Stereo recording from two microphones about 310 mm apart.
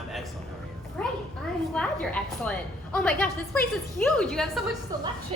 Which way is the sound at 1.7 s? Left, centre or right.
Centre.